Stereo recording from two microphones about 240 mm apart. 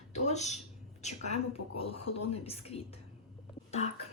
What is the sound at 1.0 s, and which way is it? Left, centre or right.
A woman's voice, left.